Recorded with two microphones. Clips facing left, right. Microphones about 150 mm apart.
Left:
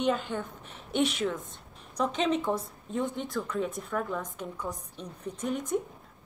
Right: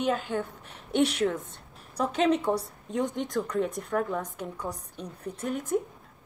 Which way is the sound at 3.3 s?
40° right (ahead or behind).